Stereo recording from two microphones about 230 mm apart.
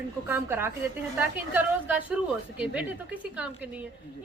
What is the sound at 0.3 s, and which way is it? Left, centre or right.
A woman's voice, centre.